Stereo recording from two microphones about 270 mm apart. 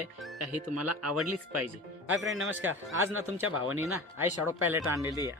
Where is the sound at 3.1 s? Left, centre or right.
Right.